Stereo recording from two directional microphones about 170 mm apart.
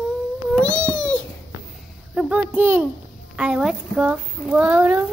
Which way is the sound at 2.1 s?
5° right (ahead or behind).